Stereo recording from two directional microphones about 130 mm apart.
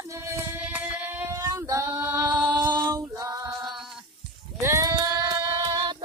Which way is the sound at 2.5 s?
35° right (ahead or behind).